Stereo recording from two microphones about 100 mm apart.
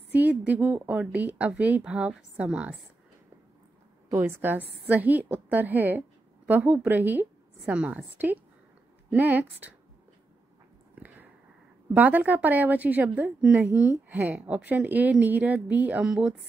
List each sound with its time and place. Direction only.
0.1 s a woman's voice: 15° right (ahead or behind)
4.2 s a woman's voice: 20° right (ahead or behind)
11.9 s a woman's voice: 15° right (ahead or behind)